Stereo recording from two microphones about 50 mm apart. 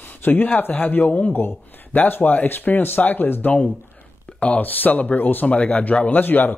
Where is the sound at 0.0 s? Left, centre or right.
Left.